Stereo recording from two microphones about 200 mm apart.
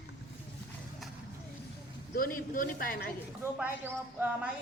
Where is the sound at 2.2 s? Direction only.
45° left (ahead or behind).